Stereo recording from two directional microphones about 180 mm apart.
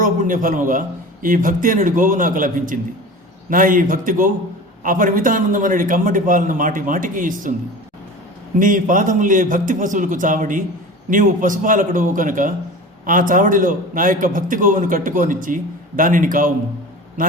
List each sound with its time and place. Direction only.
0.0 s a man's voice: 50° right (ahead or behind)
8.5 s a man's voice: 45° right (ahead or behind)